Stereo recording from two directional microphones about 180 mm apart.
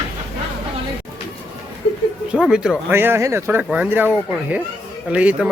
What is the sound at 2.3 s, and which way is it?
Speech, 5° right (ahead or behind).